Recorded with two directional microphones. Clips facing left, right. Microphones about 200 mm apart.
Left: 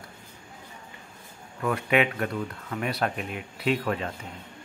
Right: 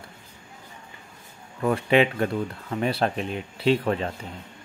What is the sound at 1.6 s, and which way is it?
Speech, 30° right (ahead or behind).